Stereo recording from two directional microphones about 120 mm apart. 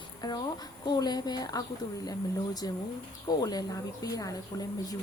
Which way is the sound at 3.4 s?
30° left (ahead or behind).